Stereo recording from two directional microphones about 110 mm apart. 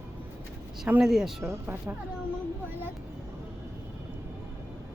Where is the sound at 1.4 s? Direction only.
20° right (ahead or behind).